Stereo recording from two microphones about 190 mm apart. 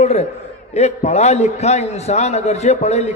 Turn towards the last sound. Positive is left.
turn(degrees=35)  # may be behind; listen again after turning